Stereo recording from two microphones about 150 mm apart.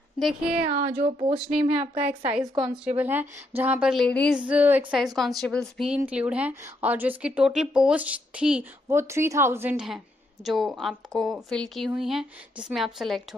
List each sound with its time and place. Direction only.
0.2 s speech: 5° right (ahead or behind)
0.7 s a woman's voice: 50° right (ahead or behind)
1.0 s speech: 35° right (ahead or behind)
1.4 s speech: 5° right (ahead or behind)
1.8 s a woman's voice: 50° right (ahead or behind)
2.5 s speech: 5° right (ahead or behind)
3.9 s speech: 5° left (ahead or behind)
4.4 s speech: 10° right (ahead or behind)
4.9 s speech: centre (ahead or behind)